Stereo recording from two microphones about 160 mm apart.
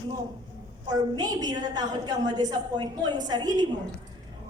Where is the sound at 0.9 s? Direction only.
25° right (ahead or behind).